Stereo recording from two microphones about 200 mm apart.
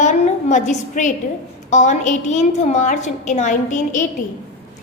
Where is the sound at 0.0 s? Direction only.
35° left (ahead or behind).